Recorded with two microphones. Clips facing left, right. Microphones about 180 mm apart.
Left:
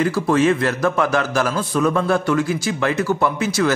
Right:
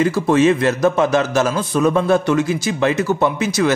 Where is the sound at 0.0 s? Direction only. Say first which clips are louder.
Right 3 dB; 20° right (ahead or behind).